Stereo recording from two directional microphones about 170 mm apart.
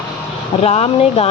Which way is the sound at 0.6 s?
40° left (ahead or behind).